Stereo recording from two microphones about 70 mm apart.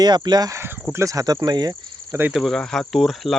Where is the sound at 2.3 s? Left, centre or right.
Centre.